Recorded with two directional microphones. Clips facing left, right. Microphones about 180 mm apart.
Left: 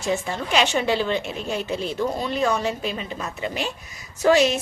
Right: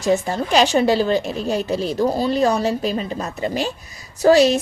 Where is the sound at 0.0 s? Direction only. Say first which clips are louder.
Right 6 dB; 40° right (ahead or behind).